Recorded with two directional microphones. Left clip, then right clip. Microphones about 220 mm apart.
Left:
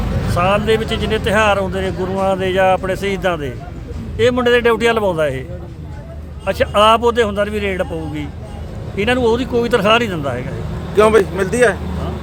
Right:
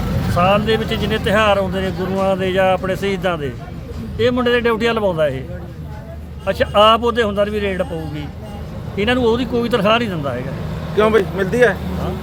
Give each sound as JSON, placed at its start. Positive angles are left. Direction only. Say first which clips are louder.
{"t": 0.3, "sound": "a man's voice", "louder": "even", "side_deg": 5}
{"t": 6.4, "sound": "a man's voice", "louder": "even", "side_deg": 5}